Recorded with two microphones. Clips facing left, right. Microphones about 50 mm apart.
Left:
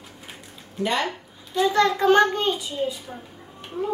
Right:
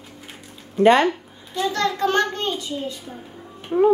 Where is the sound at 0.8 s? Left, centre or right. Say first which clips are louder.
Right 10 dB; right.